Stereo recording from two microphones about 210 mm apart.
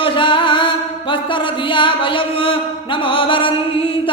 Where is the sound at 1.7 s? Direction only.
25° left (ahead or behind).